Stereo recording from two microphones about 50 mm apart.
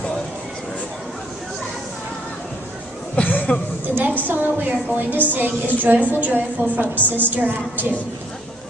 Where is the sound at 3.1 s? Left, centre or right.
Left.